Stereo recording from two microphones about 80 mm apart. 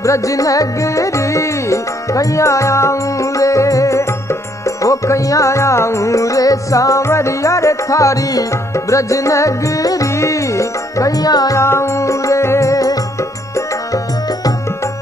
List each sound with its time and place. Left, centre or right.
0.0 s music: left
11.5 s music: left